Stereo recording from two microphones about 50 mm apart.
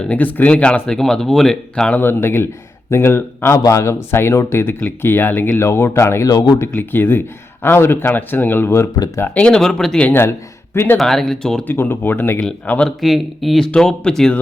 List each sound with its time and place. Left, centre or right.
0.1 s speech: left; by 1.5 s centre
2.0 s speech: left
2.9 s speech: left
3.5 s a man's voice: left
4.2 s speech: left
5.5 s speech: left
6.7 s speech: left
9.5 s speech: centre
10.1 s speech: left
10.9 s speech: centre
11.6 s speech: left
13.0 s speech: centre
13.7 s speech: centre